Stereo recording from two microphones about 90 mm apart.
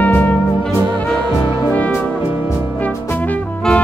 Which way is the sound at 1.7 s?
20° left (ahead or behind).